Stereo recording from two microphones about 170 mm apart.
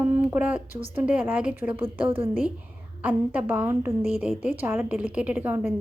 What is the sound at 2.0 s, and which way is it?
Speech, 35° right (ahead or behind).